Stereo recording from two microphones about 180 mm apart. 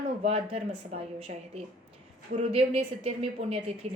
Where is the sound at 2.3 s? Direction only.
35° right (ahead or behind).